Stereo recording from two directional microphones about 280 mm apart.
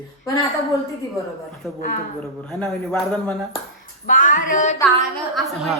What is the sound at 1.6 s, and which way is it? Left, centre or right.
Speech, centre.